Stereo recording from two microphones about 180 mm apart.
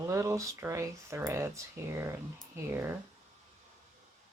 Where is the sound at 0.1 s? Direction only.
15° right (ahead or behind).